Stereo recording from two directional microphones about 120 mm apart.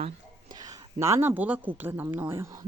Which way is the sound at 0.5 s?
30° right (ahead or behind).